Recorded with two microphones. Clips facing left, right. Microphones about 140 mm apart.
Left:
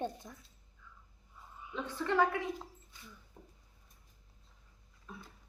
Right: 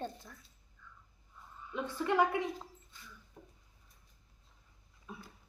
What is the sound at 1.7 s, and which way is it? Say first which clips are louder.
Speech: right 1 dB; 15° right (ahead or behind).